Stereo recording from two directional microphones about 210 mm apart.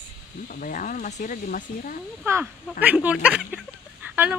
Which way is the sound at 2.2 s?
10° right (ahead or behind).